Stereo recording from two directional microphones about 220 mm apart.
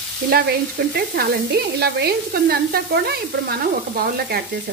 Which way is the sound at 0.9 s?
45° right (ahead or behind).